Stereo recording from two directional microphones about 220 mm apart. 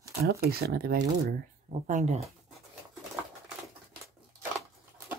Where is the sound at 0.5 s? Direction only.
45° right (ahead or behind).